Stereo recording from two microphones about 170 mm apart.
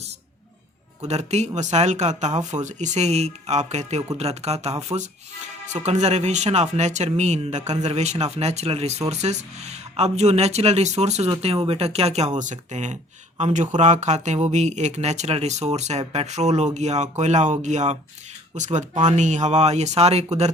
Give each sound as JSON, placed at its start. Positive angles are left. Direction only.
{"t": 1.0, "sound": "speech", "side_deg": -40}